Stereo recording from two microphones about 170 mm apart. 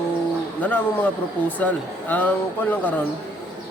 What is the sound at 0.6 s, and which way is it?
A man's voice, 10° left (ahead or behind).